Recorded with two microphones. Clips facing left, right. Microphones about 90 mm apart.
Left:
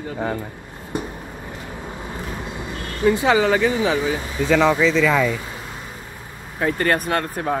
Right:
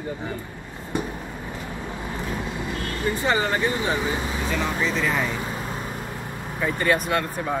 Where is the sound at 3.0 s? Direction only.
90° left.